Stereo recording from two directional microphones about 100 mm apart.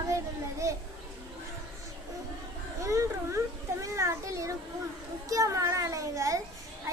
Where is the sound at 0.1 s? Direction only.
30° right (ahead or behind).